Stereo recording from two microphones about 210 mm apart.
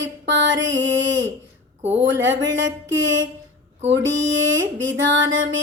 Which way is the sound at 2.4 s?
60° right (ahead or behind).